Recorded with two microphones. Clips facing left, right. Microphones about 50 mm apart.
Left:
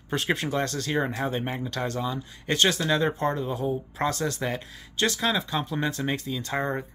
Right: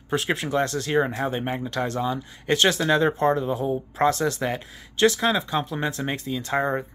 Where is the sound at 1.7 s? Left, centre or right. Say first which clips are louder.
Right 3 dB; right.